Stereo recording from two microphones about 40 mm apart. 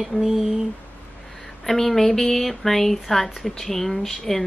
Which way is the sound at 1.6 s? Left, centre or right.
Centre.